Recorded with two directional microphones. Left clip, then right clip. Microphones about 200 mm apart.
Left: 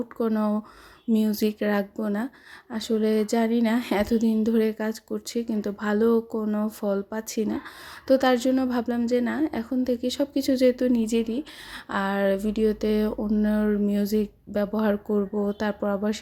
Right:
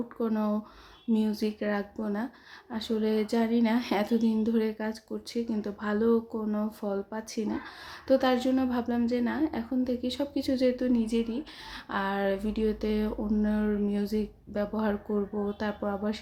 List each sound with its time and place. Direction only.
0.2 s speech: 25° left (ahead or behind)